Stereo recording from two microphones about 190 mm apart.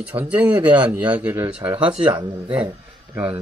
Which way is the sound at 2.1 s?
25° right (ahead or behind).